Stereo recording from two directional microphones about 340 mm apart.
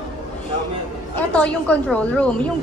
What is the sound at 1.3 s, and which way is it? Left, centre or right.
A woman's voice, centre.